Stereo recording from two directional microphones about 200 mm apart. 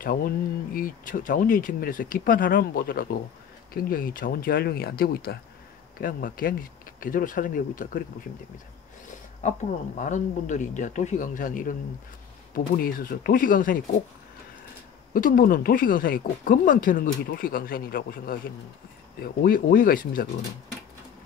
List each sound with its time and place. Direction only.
0.0 s speech: 45° left (ahead or behind)
9.9 s a man's voice: 40° left (ahead or behind)
15.1 s speech: 45° left (ahead or behind)
19.4 s speech: 45° left (ahead or behind)